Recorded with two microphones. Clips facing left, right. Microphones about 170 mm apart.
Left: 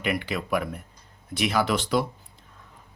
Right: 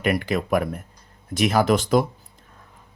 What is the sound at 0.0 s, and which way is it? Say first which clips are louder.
Speech: right 5 dB; 45° right (ahead or behind).